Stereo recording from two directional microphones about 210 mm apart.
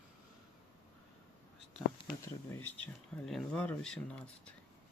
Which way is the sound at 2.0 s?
20° left (ahead or behind).